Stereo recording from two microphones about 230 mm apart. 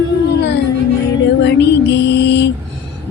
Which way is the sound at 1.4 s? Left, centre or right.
Left.